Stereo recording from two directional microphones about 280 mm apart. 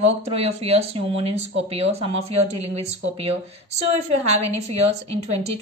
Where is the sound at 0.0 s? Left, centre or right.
Right.